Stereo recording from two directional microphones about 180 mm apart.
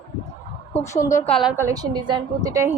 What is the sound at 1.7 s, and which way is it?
A woman's voice, 25° right (ahead or behind).